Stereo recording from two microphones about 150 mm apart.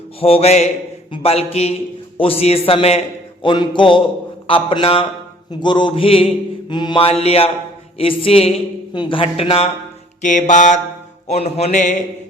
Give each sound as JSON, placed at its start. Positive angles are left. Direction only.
{"t": 0.2, "sound": "music", "side_deg": 40}
{"t": 1.1, "sound": "a sound", "side_deg": 40}
{"t": 10.2, "sound": "mantra", "side_deg": 55}
{"t": 11.3, "sound": "music", "side_deg": 45}